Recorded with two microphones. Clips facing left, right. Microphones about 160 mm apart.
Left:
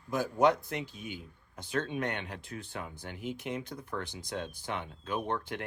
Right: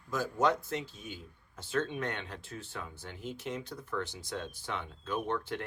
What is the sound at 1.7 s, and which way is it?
Speech, 60° left (ahead or behind).